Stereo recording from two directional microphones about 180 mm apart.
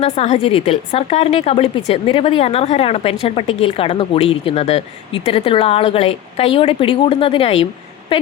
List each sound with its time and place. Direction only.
0.0 s a woman's voice: 35° left (ahead or behind)